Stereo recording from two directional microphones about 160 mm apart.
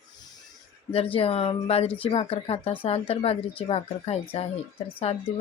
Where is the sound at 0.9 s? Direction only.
35° left (ahead or behind).